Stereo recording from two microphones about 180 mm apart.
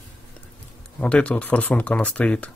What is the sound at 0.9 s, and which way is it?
Speech, 5° left (ahead or behind).